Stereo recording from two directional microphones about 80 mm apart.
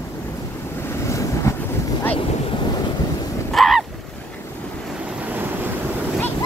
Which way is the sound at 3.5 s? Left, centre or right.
Centre.